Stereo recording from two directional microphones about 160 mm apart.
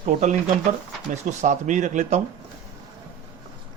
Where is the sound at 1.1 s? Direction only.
45° right (ahead or behind).